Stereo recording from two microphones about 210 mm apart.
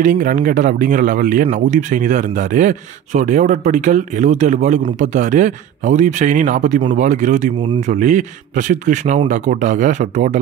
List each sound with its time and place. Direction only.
0.0 s speech: 40° right (ahead or behind)